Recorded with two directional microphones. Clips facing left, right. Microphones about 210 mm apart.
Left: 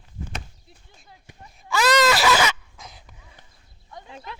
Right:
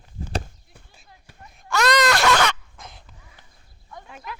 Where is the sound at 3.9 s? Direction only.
20° left (ahead or behind).